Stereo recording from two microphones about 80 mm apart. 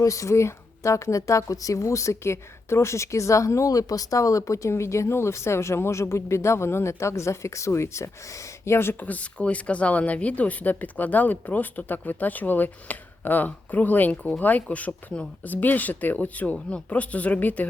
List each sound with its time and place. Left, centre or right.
0.0 s speech: left; by 17.7 s centre